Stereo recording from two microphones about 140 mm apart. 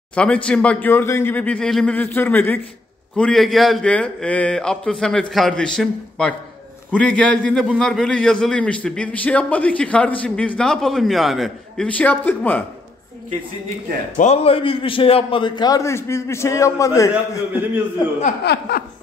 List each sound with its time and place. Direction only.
0.1 s a man's voice: 10° left (ahead or behind)
14.1 s a man's voice: 55° left (ahead or behind); by 17.1 s 20° left (ahead or behind)
17.5 s a man's voice: 15° right (ahead or behind)
18.2 s chuckle: 90° left